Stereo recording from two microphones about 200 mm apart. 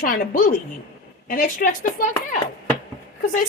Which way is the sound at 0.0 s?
45° left (ahead or behind).